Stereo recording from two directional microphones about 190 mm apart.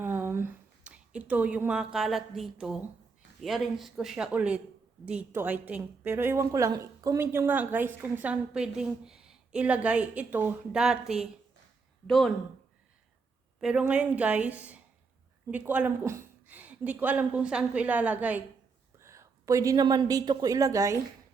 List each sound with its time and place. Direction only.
0.0 s a sound: 10° right (ahead or behind)
3.4 s a woman's voice: centre (ahead or behind)
13.6 s a woman's voice: 5° right (ahead or behind)